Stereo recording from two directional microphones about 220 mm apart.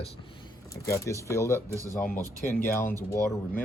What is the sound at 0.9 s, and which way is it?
Speech, 15° left (ahead or behind).